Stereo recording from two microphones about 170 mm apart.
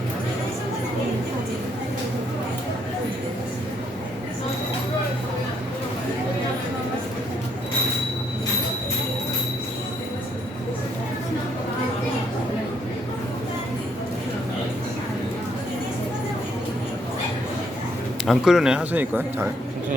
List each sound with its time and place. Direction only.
18.3 s speech: 5° right (ahead or behind)